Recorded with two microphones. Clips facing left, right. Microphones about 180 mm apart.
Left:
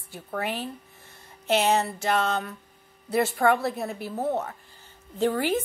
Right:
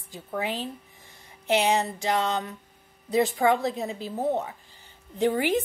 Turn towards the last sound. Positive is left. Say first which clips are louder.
# right 1 dB
turn(degrees=-15)  # may be behind; listen again after turning